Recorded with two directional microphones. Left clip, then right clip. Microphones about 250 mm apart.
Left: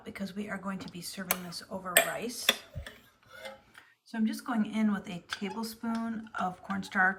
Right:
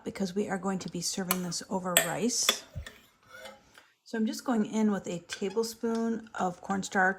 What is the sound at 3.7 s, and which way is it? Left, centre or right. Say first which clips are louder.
Speech: right 5 dB; centre.